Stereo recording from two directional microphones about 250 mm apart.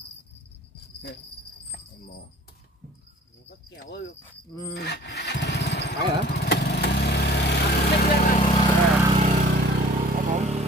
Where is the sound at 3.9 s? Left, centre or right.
Left.